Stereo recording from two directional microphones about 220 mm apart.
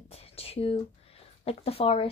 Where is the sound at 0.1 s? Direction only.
25° left (ahead or behind).